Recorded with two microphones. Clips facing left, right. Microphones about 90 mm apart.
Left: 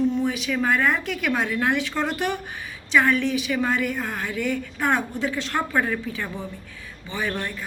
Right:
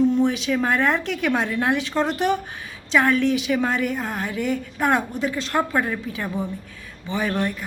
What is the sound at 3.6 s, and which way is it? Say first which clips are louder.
A woman's voice: right 1 dB; 25° right (ahead or behind).